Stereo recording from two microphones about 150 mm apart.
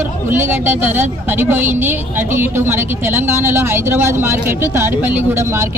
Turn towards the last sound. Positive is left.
turn(degrees=-20)  # may be behind; listen again after turning